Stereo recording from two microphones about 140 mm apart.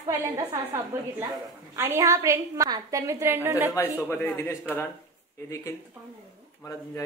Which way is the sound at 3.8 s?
20° left (ahead or behind).